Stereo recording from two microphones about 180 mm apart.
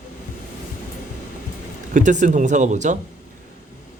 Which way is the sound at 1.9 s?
45° right (ahead or behind).